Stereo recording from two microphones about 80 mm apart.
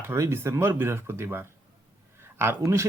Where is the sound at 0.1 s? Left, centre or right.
Right.